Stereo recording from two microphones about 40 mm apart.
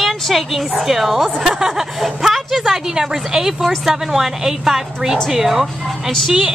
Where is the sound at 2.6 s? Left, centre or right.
Centre.